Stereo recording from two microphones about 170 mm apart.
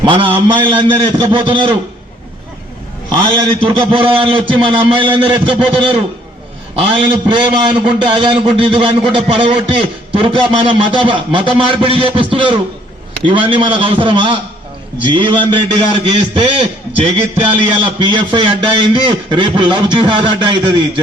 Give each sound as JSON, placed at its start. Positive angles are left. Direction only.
{"t": 0.0, "sound": "a man's voice", "side_deg": -30}
{"t": 3.8, "sound": "a man's voice", "side_deg": -30}